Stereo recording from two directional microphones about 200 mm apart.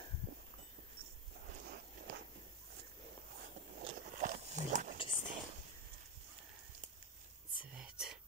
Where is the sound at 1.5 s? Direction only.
50° right (ahead or behind).